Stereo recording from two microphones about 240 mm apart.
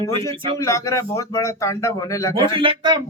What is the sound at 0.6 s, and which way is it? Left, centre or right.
Speech, centre.